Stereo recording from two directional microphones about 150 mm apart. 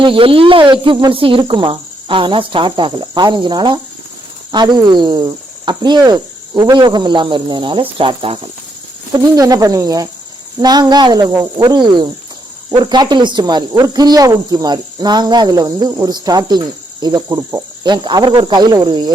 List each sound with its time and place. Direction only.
0.0 s speech: 35° right (ahead or behind)
9.1 s speech: 25° right (ahead or behind)